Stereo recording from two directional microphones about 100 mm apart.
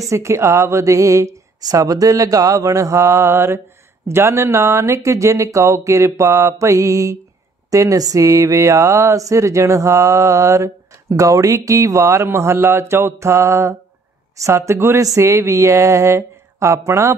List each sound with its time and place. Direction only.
0.1 s speech: 30° right (ahead or behind)